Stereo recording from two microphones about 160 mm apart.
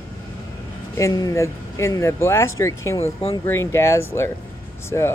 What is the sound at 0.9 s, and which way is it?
Speech, 20° left (ahead or behind).